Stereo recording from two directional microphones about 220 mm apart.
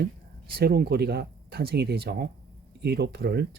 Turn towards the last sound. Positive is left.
turn(degrees=-45)  # may be behind; listen again after turning